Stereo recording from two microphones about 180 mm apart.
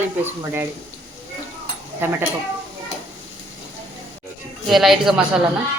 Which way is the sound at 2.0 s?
10° right (ahead or behind).